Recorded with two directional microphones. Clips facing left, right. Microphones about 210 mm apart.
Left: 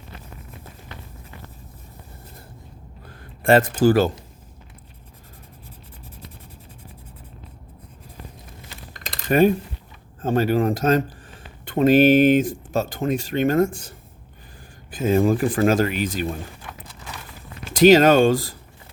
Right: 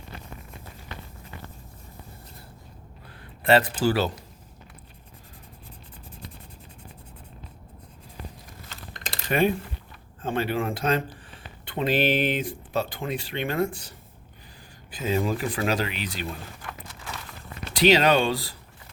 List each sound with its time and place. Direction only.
3.4 s speech: 50° left (ahead or behind)
9.3 s speech: 45° left (ahead or behind)
17.7 s speech: 45° left (ahead or behind)